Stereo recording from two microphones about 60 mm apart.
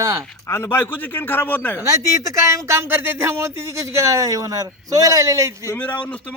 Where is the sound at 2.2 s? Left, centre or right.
Right.